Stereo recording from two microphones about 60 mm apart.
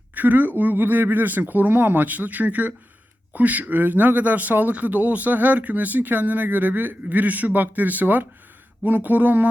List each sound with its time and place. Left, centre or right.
0.1 s speech: right